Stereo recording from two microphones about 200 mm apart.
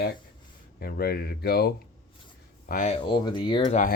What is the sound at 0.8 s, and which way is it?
Speech, 50° left (ahead or behind).